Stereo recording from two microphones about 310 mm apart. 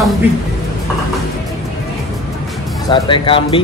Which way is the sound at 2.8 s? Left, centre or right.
Centre.